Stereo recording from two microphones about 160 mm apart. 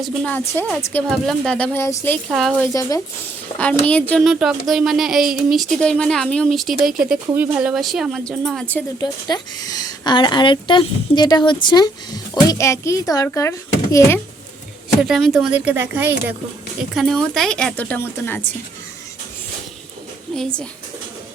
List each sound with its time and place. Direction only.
0.0 s a woman's voice: 10° left (ahead or behind)
3.5 s a woman's voice: 40° left (ahead or behind)
3.8 s speech: 10° left (ahead or behind)
9.0 s a woman's voice: 25° left (ahead or behind)
15.0 s speech: 5° right (ahead or behind)
16.9 s speech: centre (ahead or behind)
20.3 s speech: 5° left (ahead or behind)